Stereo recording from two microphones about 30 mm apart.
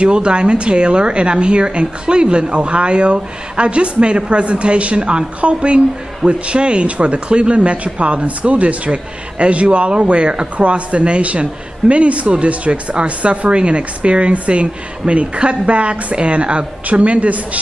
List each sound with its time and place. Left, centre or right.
0.0 s a woman's voice: right